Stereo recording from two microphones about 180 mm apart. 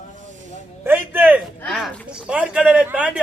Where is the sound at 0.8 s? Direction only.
10° right (ahead or behind).